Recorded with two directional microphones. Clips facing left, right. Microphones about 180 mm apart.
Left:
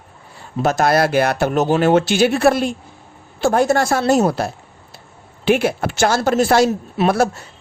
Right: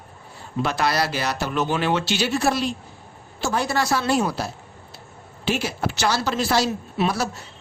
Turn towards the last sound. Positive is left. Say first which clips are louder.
# left 7 dB
turn(degrees=50)  # may be behind; listen again after turning